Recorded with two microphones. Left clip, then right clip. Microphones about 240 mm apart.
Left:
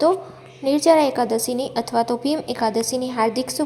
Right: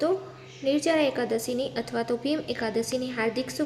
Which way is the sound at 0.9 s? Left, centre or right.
Centre.